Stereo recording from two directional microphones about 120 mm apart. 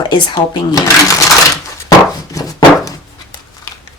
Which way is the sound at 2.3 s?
30° left (ahead or behind).